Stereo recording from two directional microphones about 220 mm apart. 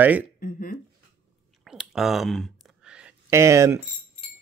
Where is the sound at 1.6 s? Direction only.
Centre (ahead or behind).